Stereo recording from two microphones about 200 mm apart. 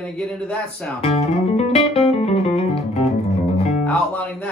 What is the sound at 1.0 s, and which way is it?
Music, 30° left (ahead or behind).